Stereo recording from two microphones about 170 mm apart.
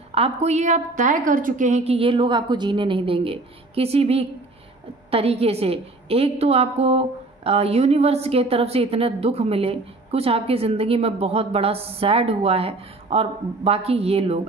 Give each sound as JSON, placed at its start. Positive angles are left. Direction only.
{"t": 0.1, "sound": "a woman's voice", "side_deg": -40}